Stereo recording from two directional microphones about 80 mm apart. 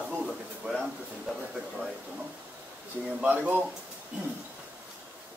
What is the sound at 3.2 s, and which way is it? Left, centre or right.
Speech, right.